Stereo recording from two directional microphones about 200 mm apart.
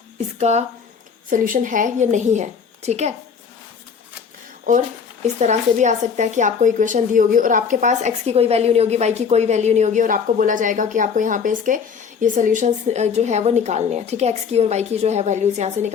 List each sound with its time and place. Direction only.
0.3 s speech: 35° right (ahead or behind)
5.2 s speech: 35° right (ahead or behind)